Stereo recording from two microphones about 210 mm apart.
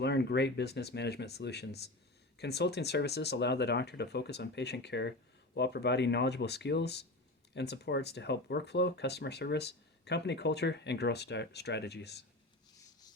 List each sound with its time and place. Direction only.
0.0 s speech: 50° left (ahead or behind)